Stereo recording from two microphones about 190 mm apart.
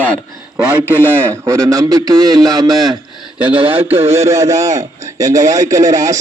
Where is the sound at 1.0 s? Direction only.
10° right (ahead or behind).